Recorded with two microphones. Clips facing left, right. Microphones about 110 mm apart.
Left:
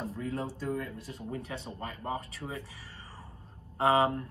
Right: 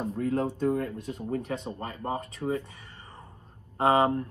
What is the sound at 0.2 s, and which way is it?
Speech, 55° right (ahead or behind).